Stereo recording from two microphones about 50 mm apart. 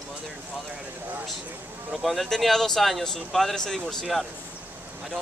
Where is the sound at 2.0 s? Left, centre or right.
Centre.